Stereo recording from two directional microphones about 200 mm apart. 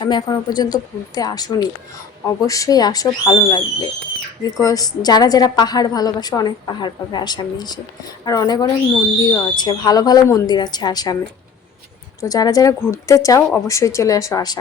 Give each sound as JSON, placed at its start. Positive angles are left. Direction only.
{"t": 0.0, "sound": "a woman's voice", "side_deg": 20}
{"t": 12.2, "sound": "speech", "side_deg": 20}